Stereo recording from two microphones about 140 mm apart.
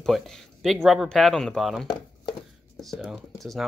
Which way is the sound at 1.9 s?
35° left (ahead or behind).